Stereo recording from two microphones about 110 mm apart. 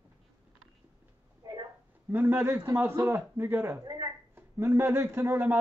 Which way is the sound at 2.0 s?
20° right (ahead or behind).